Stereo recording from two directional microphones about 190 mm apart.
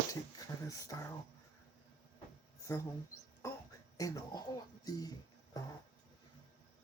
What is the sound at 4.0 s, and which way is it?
Speech, 20° left (ahead or behind).